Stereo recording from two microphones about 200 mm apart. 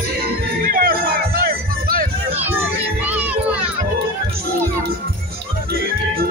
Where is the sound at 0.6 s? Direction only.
45° right (ahead or behind).